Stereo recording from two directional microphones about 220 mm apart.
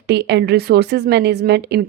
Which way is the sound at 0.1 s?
50° right (ahead or behind).